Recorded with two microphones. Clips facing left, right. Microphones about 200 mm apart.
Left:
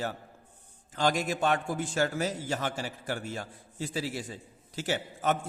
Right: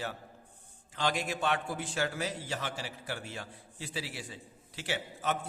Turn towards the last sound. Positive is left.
turn(degrees=45)  # may be behind; listen again after turning